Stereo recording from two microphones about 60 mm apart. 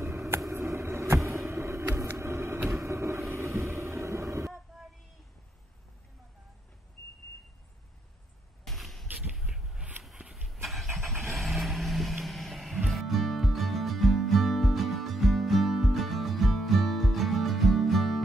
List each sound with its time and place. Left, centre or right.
0.5 s vehicle: right
2.7 s train: right
8.6 s a sound: centre
10.5 s vehicle: centre